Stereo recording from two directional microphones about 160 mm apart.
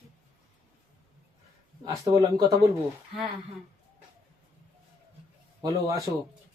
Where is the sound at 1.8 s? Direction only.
25° right (ahead or behind).